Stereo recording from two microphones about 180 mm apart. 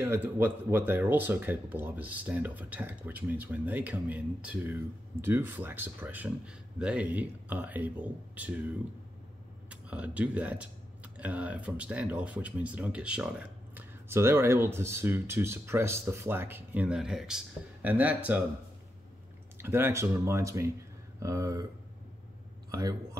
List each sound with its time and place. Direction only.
0.0 s speech: 10° right (ahead or behind)
19.6 s speech: 15° right (ahead or behind)
22.7 s a man's voice: 20° right (ahead or behind)